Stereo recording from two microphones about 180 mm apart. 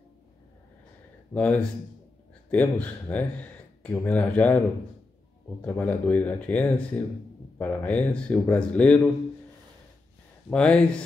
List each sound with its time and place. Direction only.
1.3 s speech: 5° left (ahead or behind)
10.5 s speech: 5° left (ahead or behind)